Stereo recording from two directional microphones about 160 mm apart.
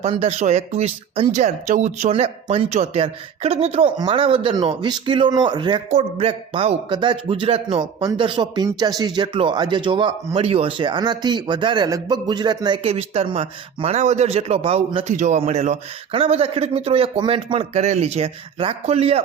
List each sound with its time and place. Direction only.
0.0 s a man's voice: 40° right (ahead or behind)
5.9 s speech: 40° right (ahead or behind)